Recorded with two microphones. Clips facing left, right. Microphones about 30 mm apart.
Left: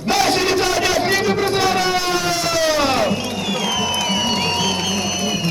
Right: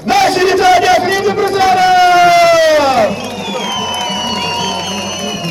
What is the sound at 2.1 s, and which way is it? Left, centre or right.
Siren, right.